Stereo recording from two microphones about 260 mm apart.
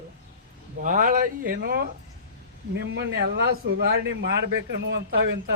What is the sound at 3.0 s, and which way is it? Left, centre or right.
Speech, right.